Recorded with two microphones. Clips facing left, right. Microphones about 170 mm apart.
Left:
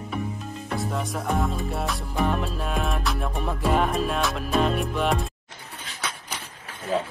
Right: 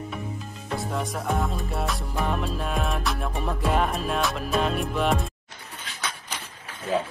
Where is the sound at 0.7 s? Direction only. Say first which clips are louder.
Even; centre (ahead or behind).